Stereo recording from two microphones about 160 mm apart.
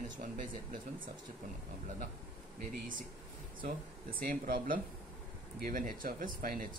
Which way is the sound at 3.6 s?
65° right (ahead or behind).